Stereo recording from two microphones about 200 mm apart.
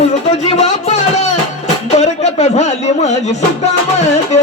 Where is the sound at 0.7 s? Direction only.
35° left (ahead or behind).